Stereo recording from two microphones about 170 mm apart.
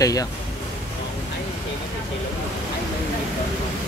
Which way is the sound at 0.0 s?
20° left (ahead or behind).